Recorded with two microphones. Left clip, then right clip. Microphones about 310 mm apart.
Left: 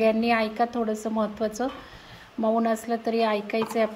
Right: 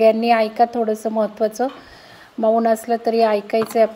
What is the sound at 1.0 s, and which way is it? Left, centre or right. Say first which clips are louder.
A woman's voice: right 8 dB; right.